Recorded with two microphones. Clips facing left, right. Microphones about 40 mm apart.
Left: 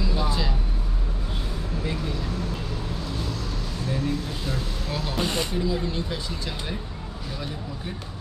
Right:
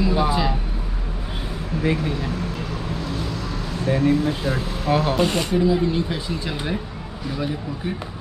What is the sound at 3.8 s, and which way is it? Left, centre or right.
Speech, right.